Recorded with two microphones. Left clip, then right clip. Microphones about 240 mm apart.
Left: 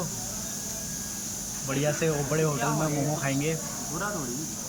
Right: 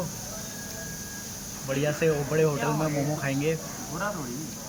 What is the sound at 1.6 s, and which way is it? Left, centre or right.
Speech, centre.